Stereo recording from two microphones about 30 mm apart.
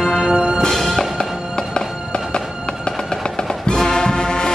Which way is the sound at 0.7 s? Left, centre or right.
Centre.